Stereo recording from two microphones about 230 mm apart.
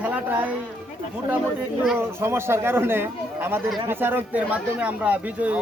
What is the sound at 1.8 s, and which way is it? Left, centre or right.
Speech, centre.